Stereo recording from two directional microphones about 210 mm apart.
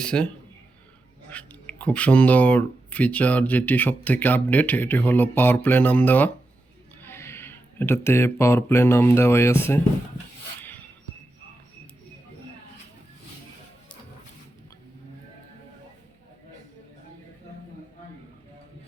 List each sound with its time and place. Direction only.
0.0 s a man's voice: 5° left (ahead or behind)
1.3 s speech: 5° left (ahead or behind)
10.6 s music: 10° left (ahead or behind)